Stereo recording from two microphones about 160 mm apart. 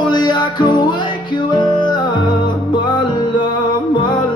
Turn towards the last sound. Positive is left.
turn(degrees=30)  # may be behind; listen again after turning